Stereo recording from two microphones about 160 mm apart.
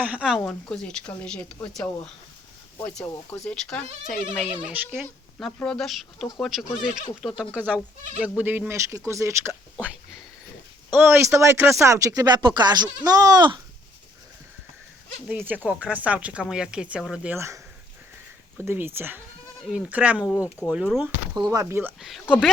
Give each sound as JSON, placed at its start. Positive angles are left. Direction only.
{"t": 0.0, "sound": "speech", "side_deg": -5}
{"t": 5.6, "sound": "speech", "side_deg": 5}
{"t": 10.9, "sound": "speech", "side_deg": -15}
{"t": 15.3, "sound": "speech", "side_deg": -10}
{"t": 17.3, "sound": "speech", "side_deg": -15}
{"t": 21.3, "sound": "speech", "side_deg": -25}
{"t": 22.0, "sound": "speech", "side_deg": 0}